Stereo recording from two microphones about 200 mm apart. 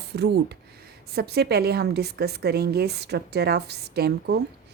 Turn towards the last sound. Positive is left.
turn(degrees=-55)  # may be behind; listen again after turning